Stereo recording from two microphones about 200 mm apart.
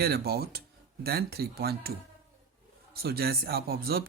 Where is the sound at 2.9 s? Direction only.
50° right (ahead or behind).